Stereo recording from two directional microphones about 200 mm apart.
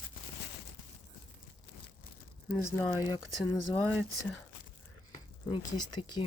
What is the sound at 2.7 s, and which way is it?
Speech, 15° left (ahead or behind).